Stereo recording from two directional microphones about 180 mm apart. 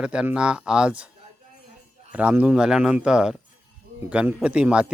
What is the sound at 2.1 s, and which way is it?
Speech, 10° right (ahead or behind).